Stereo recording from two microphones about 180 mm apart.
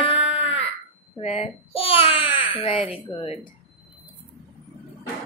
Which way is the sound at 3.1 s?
30° left (ahead or behind).